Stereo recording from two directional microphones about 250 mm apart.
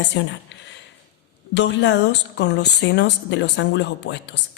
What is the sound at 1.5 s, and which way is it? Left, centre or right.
Speech, left.